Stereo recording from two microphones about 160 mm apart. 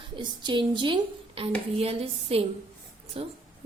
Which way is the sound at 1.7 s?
35° right (ahead or behind).